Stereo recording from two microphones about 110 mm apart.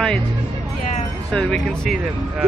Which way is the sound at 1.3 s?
5° left (ahead or behind).